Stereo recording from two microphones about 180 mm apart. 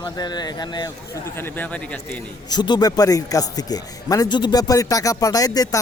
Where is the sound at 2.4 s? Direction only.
25° left (ahead or behind).